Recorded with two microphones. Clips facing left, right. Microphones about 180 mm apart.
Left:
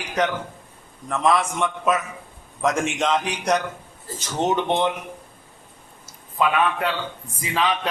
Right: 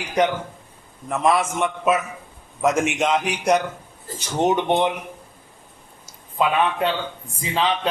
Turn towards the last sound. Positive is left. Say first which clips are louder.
# right 1 dB
turn(degrees=-25)  # may be behind; listen again after turning